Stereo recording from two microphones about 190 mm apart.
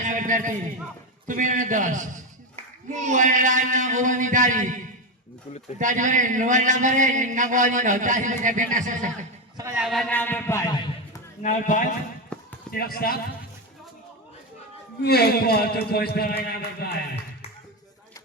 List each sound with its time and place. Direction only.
0.0 s a sound: 40° right (ahead or behind)
1.4 s a man's voice: 45° right (ahead or behind)
5.8 s a man's voice: 40° right (ahead or behind)
9.6 s a man's voice: 15° right (ahead or behind)
9.8 s a man's voice: centre (ahead or behind); by 11.2 s 20° left (ahead or behind)
11.4 s a man's voice: 40° left (ahead or behind)
12.3 s basketball bounce: 5° left (ahead or behind)
12.7 s a man's voice: 50° left (ahead or behind)
15.0 s a man's voice: 55° left (ahead or behind)